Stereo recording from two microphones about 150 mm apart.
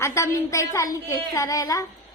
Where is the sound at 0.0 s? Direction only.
20° left (ahead or behind).